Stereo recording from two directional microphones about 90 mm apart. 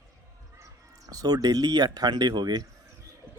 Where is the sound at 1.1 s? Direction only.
45° right (ahead or behind).